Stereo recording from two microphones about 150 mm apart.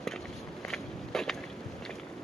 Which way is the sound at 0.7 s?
5° left (ahead or behind).